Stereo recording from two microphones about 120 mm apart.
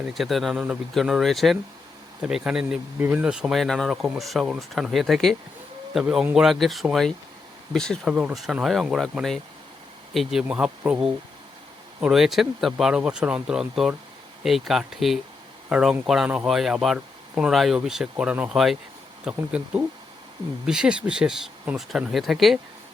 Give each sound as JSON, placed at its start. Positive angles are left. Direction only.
{"t": 0.1, "sound": "speech", "side_deg": 0}
{"t": 8.1, "sound": "speech", "side_deg": -5}
{"t": 12.1, "sound": "speech", "side_deg": 0}